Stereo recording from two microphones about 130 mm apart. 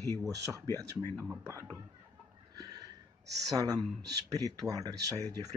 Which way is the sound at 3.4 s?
30° right (ahead or behind).